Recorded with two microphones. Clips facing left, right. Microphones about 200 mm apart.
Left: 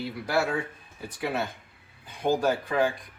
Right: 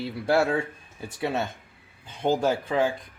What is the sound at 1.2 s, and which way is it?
Speech, 25° right (ahead or behind).